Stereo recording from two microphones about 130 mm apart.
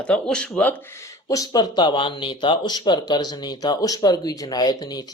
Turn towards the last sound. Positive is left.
turn(degrees=30)  # may be behind; listen again after turning